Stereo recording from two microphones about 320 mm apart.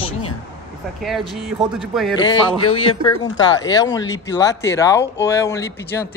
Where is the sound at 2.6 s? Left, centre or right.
Left.